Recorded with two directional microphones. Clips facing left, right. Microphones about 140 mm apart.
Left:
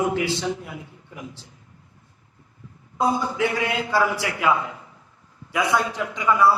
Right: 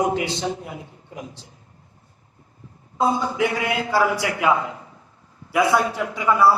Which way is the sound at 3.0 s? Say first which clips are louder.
Right 1 dB; 20° right (ahead or behind).